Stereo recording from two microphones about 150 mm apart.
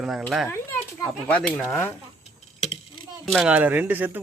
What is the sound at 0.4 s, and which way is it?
Children playing, 20° left (ahead or behind).